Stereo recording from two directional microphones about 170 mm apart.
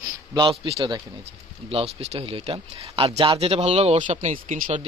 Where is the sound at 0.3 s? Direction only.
25° right (ahead or behind).